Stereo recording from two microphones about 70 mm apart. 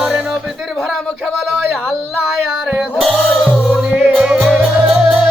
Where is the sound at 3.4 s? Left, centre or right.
Centre.